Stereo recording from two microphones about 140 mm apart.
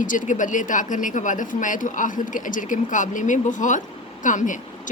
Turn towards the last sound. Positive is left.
turn(degrees=65)  # may be behind; listen again after turning